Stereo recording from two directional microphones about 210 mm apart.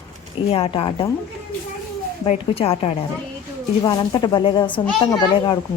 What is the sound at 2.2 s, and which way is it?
A woman's voice, 25° left (ahead or behind).